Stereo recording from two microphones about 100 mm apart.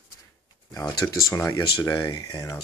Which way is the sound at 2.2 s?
35° left (ahead or behind).